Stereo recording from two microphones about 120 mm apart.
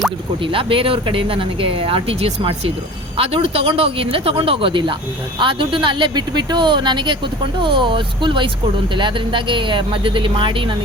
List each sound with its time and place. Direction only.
0.4 s speech: 45° right (ahead or behind)